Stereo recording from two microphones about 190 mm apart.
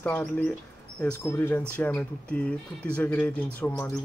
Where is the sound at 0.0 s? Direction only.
5° left (ahead or behind).